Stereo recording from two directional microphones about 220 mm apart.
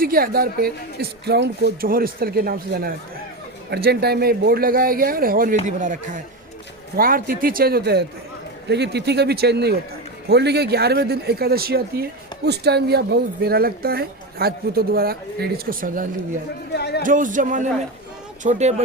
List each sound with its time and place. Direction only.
0.0 s speech: 40° right (ahead or behind)
16.7 s a man's voice: 50° left (ahead or behind)
17.0 s speech: 35° right (ahead or behind)